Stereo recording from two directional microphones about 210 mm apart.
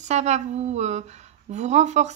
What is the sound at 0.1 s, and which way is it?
Speech, 30° right (ahead or behind).